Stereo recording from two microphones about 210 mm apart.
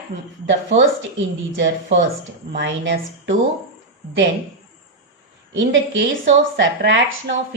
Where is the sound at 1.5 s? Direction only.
60° right (ahead or behind).